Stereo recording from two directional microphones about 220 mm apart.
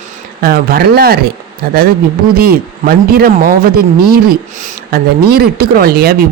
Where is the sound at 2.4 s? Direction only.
45° right (ahead or behind).